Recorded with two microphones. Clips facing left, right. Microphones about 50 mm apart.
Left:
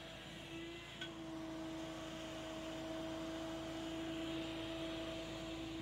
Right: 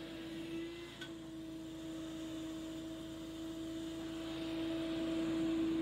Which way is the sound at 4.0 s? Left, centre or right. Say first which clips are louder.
Even; left.